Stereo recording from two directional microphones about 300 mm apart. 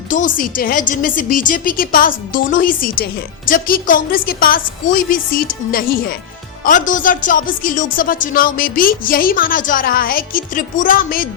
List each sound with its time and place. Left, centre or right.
0.1 s a woman's voice: left